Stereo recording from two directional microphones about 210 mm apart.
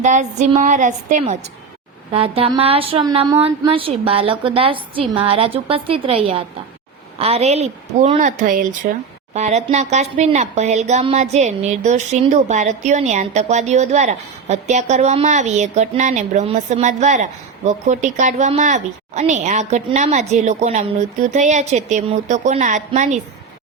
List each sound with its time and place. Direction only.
0.0 s speech: 35° right (ahead or behind)